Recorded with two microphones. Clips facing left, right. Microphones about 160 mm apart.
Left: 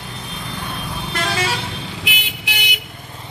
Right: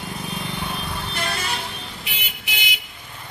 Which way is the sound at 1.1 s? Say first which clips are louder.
Left 7 dB; 90° left.